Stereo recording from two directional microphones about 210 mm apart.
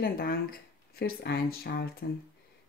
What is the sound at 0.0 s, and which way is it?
Speech, 45° left (ahead or behind).